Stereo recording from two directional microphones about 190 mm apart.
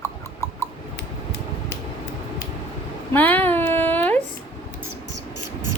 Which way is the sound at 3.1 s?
10° left (ahead or behind).